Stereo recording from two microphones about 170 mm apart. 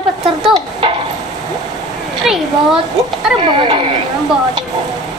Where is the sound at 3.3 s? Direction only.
30° right (ahead or behind).